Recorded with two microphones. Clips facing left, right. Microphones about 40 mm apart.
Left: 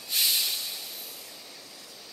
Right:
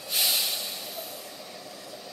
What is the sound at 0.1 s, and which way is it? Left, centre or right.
Hiss, centre.